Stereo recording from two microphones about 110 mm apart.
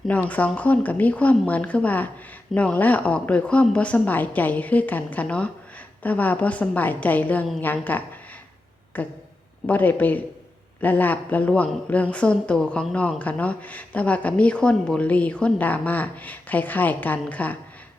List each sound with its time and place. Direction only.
0.1 s speech: 15° left (ahead or behind)